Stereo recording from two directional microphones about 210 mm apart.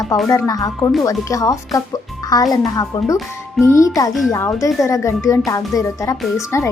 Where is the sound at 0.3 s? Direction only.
15° left (ahead or behind).